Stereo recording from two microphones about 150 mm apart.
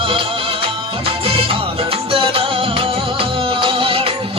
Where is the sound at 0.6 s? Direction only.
40° right (ahead or behind).